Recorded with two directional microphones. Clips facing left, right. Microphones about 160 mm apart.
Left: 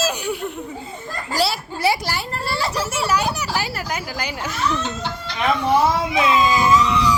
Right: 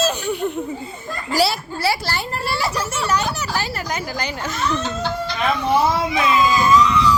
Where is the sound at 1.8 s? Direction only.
15° left (ahead or behind).